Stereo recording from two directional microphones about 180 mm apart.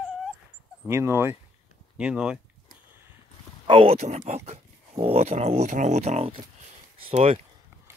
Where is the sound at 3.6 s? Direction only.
30° right (ahead or behind).